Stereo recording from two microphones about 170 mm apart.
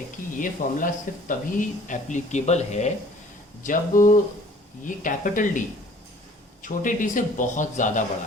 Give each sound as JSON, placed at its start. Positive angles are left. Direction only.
{"t": 0.3, "sound": "speech", "side_deg": 50}